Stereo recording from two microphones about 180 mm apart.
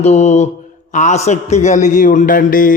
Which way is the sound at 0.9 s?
40° left (ahead or behind).